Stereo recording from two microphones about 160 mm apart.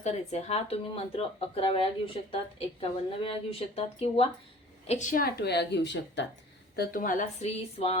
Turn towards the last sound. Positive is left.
turn(degrees=40)  # may be behind; listen again after turning